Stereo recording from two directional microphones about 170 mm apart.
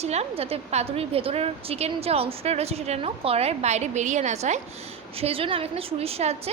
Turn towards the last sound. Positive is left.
turn(degrees=-40)  # may be behind; listen again after turning